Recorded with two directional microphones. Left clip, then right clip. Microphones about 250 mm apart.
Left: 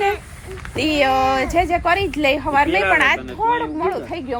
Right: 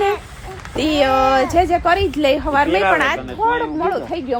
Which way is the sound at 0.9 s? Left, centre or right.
Right.